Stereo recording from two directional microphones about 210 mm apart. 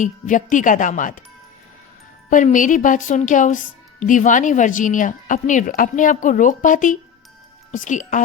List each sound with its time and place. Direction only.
0.0 s a woman's voice: 35° left (ahead or behind)
2.3 s a woman's voice: 40° left (ahead or behind)